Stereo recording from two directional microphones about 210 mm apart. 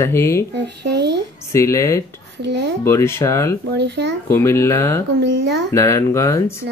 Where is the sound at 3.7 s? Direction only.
55° right (ahead or behind).